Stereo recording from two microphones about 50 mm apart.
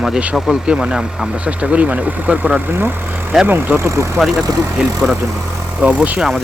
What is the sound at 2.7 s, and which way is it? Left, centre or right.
Speech, right.